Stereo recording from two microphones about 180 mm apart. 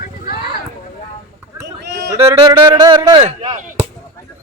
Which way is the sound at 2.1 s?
15° right (ahead or behind).